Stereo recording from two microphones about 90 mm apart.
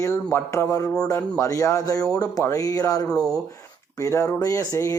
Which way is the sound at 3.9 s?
35° left (ahead or behind).